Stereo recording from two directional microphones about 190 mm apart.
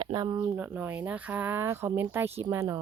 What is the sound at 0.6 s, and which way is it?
Speech, 10° right (ahead or behind).